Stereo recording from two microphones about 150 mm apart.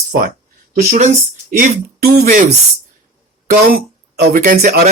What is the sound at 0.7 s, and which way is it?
Speech, 55° right (ahead or behind).